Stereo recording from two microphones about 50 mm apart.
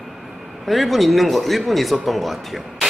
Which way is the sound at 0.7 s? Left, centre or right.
Centre.